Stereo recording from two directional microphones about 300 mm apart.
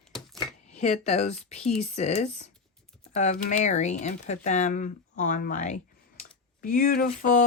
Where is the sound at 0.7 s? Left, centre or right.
Left.